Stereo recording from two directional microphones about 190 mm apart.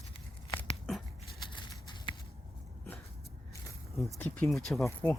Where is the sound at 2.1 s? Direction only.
25° left (ahead or behind).